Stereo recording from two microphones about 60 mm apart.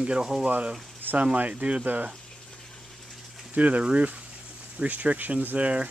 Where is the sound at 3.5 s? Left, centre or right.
Right.